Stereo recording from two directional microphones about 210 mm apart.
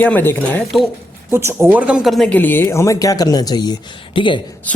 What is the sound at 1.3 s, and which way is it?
Speech, 10° right (ahead or behind).